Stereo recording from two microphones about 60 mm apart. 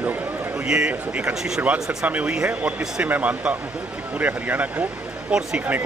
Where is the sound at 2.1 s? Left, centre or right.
Right.